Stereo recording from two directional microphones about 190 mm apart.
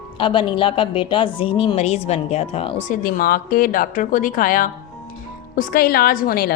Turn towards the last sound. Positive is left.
turn(degrees=50)  # may be behind; listen again after turning